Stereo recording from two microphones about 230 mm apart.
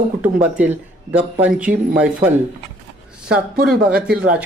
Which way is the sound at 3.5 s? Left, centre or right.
Right.